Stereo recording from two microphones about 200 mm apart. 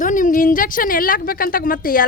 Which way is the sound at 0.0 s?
40° left (ahead or behind).